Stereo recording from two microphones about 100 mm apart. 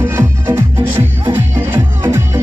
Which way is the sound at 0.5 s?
20° right (ahead or behind).